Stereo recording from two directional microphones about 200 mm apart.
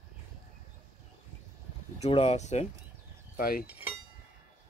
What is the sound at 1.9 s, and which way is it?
Speech, 30° left (ahead or behind).